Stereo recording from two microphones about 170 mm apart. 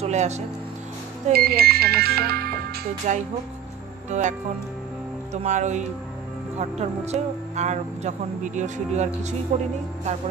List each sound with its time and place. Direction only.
0.0 s speech: 40° right (ahead or behind)
1.3 s speech: 65° right (ahead or behind)
3.1 s speech: 45° right (ahead or behind)